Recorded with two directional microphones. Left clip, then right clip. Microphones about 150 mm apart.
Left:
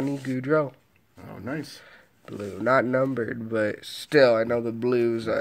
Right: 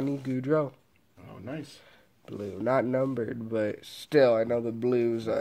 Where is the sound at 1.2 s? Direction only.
35° left (ahead or behind).